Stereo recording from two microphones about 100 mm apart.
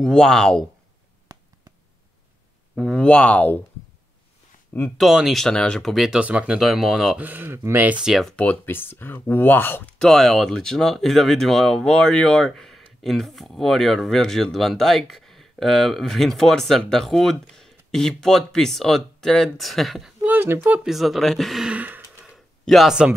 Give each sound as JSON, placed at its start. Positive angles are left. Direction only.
{"t": 0.0, "sound": "speech", "side_deg": 5}
{"t": 1.3, "sound": "a sound", "side_deg": -35}
{"t": 2.7, "sound": "speech", "side_deg": 5}
{"t": 4.9, "sound": "speech", "side_deg": -5}
{"t": 7.2, "sound": "speech", "side_deg": -20}
{"t": 8.1, "sound": "speech", "side_deg": 5}
{"t": 8.4, "sound": "speech", "side_deg": 20}
{"t": 9.9, "sound": "speech", "side_deg": 5}
{"t": 20.2, "sound": "a sound", "side_deg": -20}
{"t": 20.8, "sound": "speech", "side_deg": 0}
{"t": 21.6, "sound": "speech", "side_deg": -15}
{"t": 22.3, "sound": "a sound", "side_deg": 0}